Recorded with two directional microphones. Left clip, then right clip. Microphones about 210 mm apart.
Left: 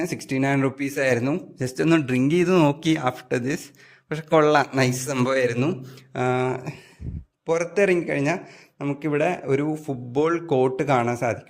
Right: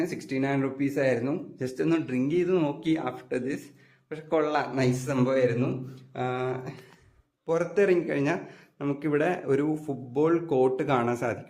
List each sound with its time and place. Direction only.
0.0 s speech: 35° left (ahead or behind)